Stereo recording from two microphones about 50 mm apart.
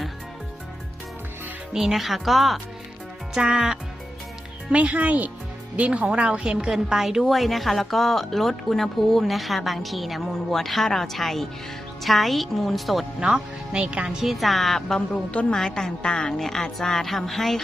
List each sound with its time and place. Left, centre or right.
1.7 s a woman's voice: centre
3.3 s speech: centre
4.7 s a woman's voice: right; by 13.1 s centre
13.1 s speech: centre
14.2 s a woman's voice: centre
15.1 s a woman's voice: left
15.5 s a woman's voice: centre